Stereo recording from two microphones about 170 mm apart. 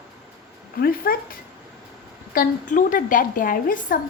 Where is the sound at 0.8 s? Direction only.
60° left (ahead or behind).